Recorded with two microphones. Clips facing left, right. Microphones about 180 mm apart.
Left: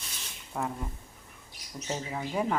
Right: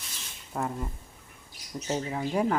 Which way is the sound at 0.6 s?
Centre (ahead or behind).